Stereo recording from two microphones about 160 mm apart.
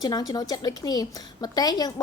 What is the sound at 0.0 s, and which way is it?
A woman's voice, 25° left (ahead or behind).